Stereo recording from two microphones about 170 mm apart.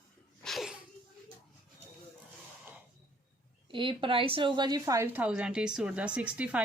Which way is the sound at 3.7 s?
30° right (ahead or behind).